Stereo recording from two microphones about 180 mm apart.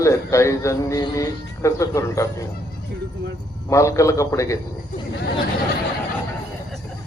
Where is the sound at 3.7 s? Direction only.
15° left (ahead or behind).